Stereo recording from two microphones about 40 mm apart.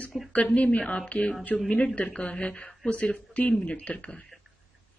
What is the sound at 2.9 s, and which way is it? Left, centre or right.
Speech, left.